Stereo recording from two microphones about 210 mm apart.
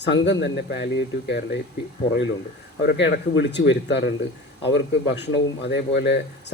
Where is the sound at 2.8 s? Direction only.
55° left (ahead or behind).